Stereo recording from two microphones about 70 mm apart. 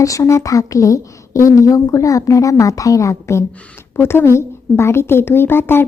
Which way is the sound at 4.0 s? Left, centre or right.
Left.